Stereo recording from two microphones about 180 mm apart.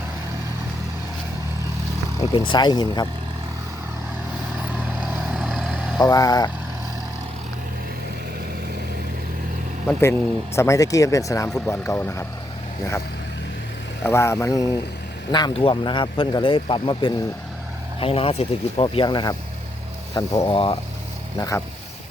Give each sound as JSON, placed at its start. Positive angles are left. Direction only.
{"t": 2.3, "sound": "speech", "side_deg": 25}
{"t": 4.7, "sound": "vehicle", "side_deg": -5}
{"t": 6.0, "sound": "speech", "side_deg": 20}
{"t": 10.0, "sound": "speech", "side_deg": 15}
{"t": 14.0, "sound": "speech", "side_deg": 15}